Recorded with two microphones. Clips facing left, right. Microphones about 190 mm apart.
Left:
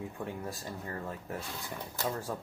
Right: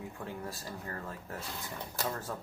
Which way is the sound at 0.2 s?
15° left (ahead or behind).